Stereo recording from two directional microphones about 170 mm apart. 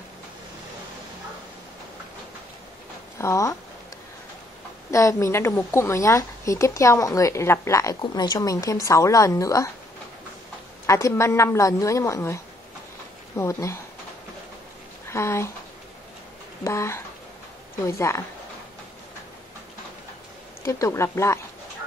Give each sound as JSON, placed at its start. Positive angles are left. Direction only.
{"t": 3.2, "sound": "speech", "side_deg": 15}
{"t": 4.9, "sound": "a woman's voice", "side_deg": 15}
{"t": 10.9, "sound": "a woman's voice", "side_deg": 20}
{"t": 13.4, "sound": "a woman's voice", "side_deg": 15}
{"t": 15.0, "sound": "speech", "side_deg": 15}
{"t": 16.6, "sound": "a woman's voice", "side_deg": 15}
{"t": 20.6, "sound": "a woman's voice", "side_deg": 15}